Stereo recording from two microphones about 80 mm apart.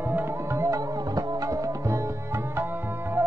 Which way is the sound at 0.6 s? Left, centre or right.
Right.